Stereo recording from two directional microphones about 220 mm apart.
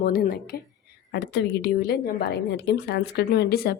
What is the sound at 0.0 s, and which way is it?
A woman's voice, 45° left (ahead or behind).